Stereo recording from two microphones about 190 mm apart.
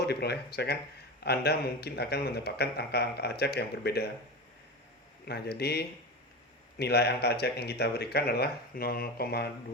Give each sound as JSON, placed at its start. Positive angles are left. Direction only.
{"t": 0.0, "sound": "speech", "side_deg": 60}
{"t": 5.2, "sound": "speech", "side_deg": 55}